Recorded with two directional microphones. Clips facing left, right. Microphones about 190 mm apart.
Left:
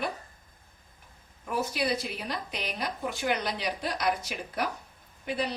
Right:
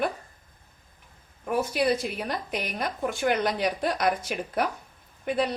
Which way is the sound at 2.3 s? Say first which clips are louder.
Right 4 dB; 55° right (ahead or behind).